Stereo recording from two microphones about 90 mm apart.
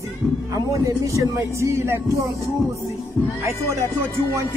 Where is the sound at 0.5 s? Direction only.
40° right (ahead or behind).